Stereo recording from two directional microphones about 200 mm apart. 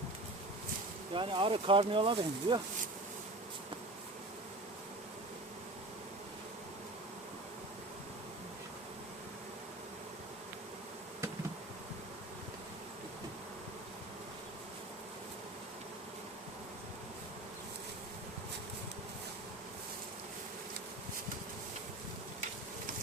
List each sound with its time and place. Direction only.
1.1 s speech: 25° right (ahead or behind)